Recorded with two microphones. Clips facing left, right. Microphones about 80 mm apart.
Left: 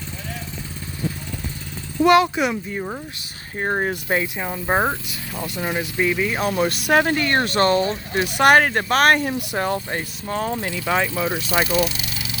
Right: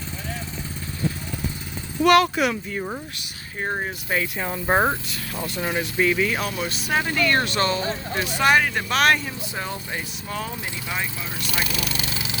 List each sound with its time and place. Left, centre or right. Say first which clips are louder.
2.0 s speech: left 2 dB; centre
3.6 s speech: left 4 dB; left
4.4 s speech: even; centre
6.4 s speech: left 7 dB; left
7.1 s speech: left 2 dB; left
8.3 s speech: left 5 dB; left
10.8 s speech: left 9 dB; left
11.6 s speech: left 9 dB; right
11.9 s vehicle: right 2 dB; right